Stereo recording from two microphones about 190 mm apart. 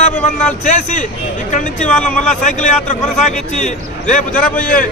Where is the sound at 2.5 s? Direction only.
40° left (ahead or behind).